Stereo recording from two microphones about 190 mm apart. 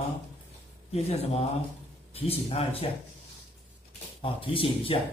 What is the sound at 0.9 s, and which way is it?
Speech, 35° left (ahead or behind).